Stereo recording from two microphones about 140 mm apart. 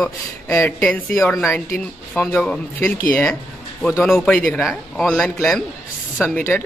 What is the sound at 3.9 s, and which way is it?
A man's voice, centre (ahead or behind).